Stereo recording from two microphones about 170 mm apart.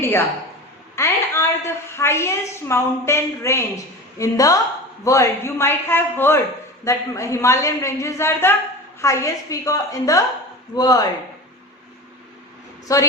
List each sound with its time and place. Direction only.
0.9 s a woman's voice: 15° left (ahead or behind)
12.9 s a woman's voice: 20° left (ahead or behind)